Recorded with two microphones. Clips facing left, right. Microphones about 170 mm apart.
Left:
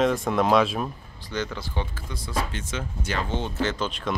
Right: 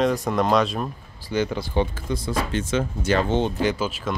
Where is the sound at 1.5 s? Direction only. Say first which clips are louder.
Right 8 dB; 20° right (ahead or behind).